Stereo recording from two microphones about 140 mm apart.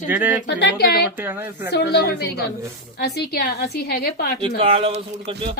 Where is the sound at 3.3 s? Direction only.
90° left.